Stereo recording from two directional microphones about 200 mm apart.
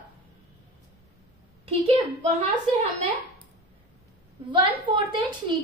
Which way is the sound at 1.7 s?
30° right (ahead or behind).